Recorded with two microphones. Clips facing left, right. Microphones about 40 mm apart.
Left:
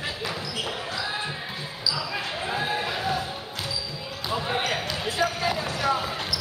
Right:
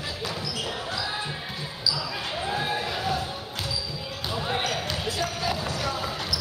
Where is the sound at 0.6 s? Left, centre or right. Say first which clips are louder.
Even; left.